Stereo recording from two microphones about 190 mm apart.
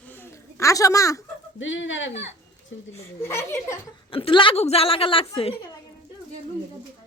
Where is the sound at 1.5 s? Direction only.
80° left.